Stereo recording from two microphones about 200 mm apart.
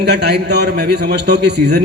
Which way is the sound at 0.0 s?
55° right (ahead or behind).